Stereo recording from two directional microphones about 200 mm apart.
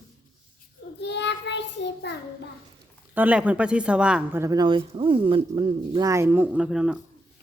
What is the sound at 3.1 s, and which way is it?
Speech, 10° right (ahead or behind).